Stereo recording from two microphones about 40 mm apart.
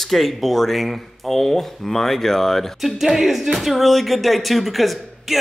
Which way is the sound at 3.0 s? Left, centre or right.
Centre.